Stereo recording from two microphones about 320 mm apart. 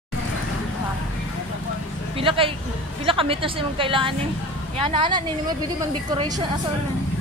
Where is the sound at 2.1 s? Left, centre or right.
Centre.